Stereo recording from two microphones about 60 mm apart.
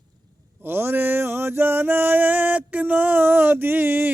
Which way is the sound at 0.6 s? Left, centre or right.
Right.